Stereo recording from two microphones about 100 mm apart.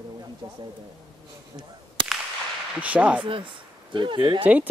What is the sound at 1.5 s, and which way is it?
Whip, 40° right (ahead or behind).